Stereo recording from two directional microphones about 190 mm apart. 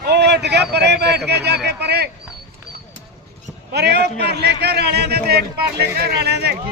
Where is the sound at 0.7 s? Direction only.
60° right (ahead or behind).